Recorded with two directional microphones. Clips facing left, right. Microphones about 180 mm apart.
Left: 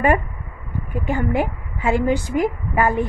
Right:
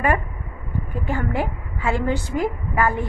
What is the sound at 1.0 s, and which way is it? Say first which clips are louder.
A woman's voice: left 4 dB; 15° left (ahead or behind).